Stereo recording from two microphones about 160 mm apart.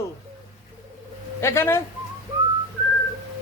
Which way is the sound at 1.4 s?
15° left (ahead or behind).